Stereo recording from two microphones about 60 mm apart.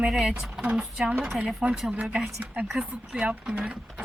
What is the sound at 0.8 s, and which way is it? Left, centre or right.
Speech, centre.